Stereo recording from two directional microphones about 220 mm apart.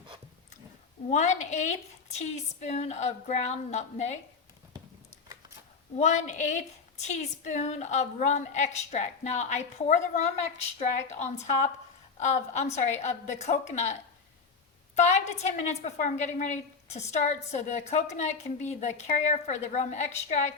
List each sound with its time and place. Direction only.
1.1 s a woman's voice: 30° left (ahead or behind)
6.0 s a woman's voice: 35° left (ahead or behind)
14.9 s a woman's voice: 30° left (ahead or behind)